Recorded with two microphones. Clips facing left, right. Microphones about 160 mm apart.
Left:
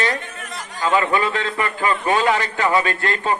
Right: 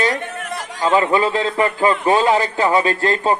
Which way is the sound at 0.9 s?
30° right (ahead or behind).